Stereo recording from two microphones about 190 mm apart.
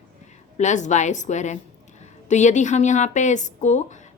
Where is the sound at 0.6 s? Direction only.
40° left (ahead or behind).